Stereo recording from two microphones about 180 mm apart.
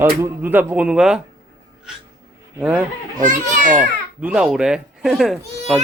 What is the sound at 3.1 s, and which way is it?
Speech, 45° right (ahead or behind).